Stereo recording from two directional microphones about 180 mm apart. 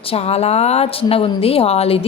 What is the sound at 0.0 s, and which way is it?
A woman's voice, 35° left (ahead or behind).